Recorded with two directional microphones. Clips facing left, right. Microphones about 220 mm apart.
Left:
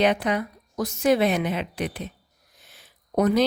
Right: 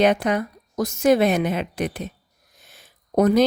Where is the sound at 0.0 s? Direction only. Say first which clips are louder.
Right 3 dB; 45° right (ahead or behind).